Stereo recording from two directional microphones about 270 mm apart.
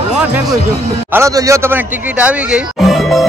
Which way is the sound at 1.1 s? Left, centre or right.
Centre.